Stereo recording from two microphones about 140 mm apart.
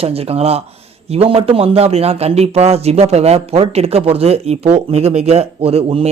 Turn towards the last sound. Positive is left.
turn(degrees=-45)  # may be behind; listen again after turning